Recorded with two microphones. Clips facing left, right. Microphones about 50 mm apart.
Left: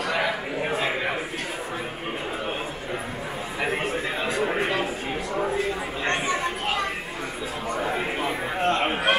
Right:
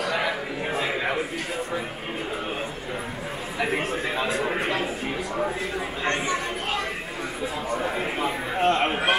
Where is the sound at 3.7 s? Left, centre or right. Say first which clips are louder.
Right 1 dB; centre.